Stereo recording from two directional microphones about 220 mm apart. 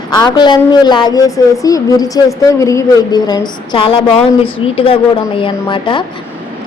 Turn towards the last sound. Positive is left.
turn(degrees=20)  # may be behind; listen again after turning